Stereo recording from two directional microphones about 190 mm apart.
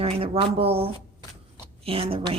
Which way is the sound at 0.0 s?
30° right (ahead or behind).